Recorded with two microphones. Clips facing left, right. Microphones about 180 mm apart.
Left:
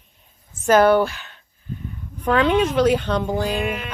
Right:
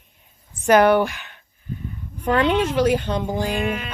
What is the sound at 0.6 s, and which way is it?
Speech, 15° right (ahead or behind).